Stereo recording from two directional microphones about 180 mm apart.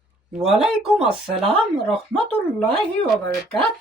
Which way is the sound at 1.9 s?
30° right (ahead or behind).